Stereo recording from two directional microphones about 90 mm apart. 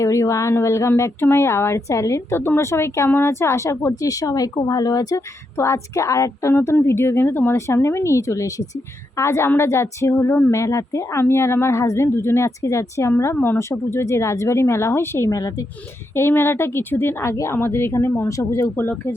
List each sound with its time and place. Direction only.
0.0 s speech: 35° left (ahead or behind)
5.5 s a woman's voice: 30° left (ahead or behind)
16.1 s a woman's voice: 25° left (ahead or behind)
18.8 s a woman's voice: 25° left (ahead or behind)